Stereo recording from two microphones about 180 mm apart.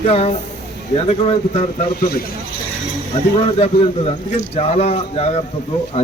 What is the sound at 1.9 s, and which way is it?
Speech, 60° left (ahead or behind).